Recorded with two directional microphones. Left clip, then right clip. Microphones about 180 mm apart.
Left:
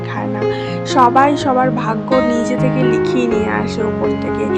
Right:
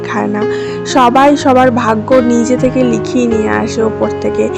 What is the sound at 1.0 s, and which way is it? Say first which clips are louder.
Speech: right 3 dB; 35° right (ahead or behind).